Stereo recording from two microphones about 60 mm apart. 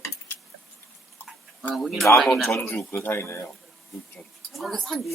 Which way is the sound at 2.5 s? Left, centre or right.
Left.